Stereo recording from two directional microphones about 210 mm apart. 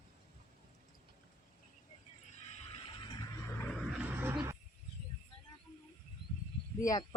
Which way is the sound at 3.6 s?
Centre (ahead or behind).